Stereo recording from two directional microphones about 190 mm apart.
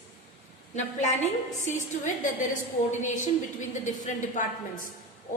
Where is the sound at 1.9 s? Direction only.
40° left (ahead or behind).